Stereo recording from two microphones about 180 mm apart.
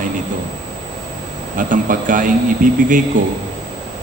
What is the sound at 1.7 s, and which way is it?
A man's voice, 50° right (ahead or behind).